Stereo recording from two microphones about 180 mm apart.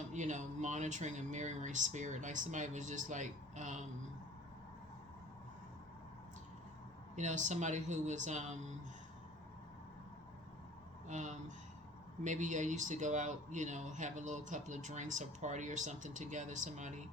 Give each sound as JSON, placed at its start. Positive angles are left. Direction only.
{"t": 0.1, "sound": "speech", "side_deg": -45}
{"t": 7.2, "sound": "speech", "side_deg": -40}
{"t": 11.1, "sound": "speech", "side_deg": -40}